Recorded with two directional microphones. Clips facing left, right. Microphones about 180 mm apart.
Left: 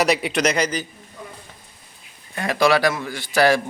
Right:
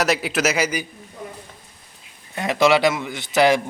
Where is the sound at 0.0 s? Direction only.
Centre (ahead or behind).